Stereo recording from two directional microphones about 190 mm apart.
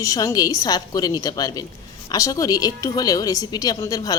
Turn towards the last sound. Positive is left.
turn(degrees=20)  # may be behind; listen again after turning